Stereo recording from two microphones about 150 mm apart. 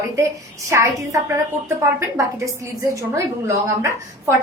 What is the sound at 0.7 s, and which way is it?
A woman's voice, 20° right (ahead or behind).